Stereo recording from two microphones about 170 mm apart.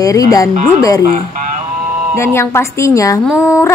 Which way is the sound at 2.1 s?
15° left (ahead or behind).